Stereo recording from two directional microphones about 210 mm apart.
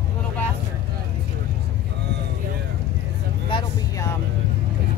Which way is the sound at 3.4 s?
25° left (ahead or behind).